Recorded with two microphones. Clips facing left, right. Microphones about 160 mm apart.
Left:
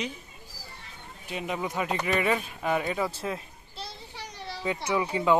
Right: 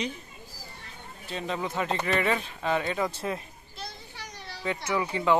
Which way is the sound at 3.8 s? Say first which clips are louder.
Left 1 dB; 30° left (ahead or behind).